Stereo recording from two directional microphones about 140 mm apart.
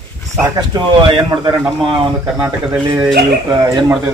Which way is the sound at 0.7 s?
35° right (ahead or behind).